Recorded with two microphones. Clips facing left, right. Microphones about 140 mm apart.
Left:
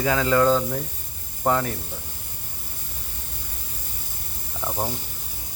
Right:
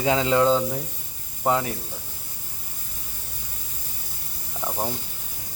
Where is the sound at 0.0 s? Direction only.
25° right (ahead or behind).